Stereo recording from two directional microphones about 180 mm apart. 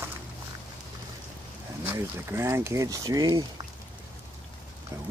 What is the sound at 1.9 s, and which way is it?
Speech, 10° right (ahead or behind).